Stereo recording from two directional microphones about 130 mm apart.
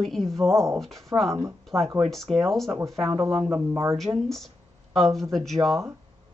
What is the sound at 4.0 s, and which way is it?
Speech, centre (ahead or behind).